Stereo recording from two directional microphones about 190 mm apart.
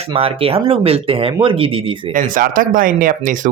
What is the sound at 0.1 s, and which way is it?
Speech, 30° right (ahead or behind).